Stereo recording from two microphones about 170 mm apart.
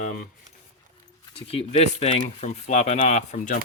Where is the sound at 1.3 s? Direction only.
35° left (ahead or behind).